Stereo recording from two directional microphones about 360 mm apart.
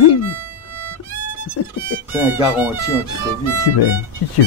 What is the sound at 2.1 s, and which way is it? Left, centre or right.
Speech, centre.